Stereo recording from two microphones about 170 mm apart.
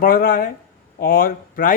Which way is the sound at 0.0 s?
60° left (ahead or behind).